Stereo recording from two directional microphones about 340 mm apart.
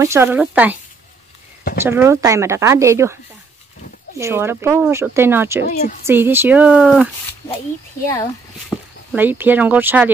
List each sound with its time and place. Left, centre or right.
0.0 s speech: centre
1.8 s speech: centre
4.2 s speech: centre
5.7 s a woman's voice: left
6.0 s speech: centre
8.1 s speech: centre
9.1 s speech: centre